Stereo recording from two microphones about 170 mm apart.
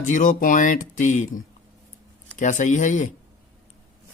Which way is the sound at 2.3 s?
45° left (ahead or behind).